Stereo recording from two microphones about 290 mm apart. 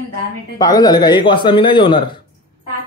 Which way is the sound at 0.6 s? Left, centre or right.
Centre.